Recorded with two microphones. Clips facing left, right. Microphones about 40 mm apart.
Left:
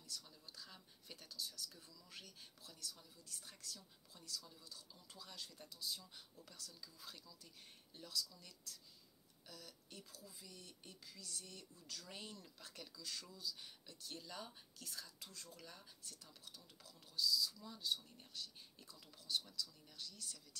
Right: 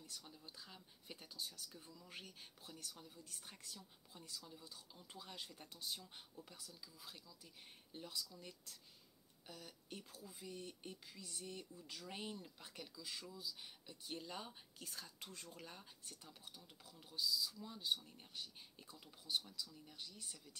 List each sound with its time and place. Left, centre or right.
0.0 s speech: right
6.5 s speech: centre
7.9 s speech: right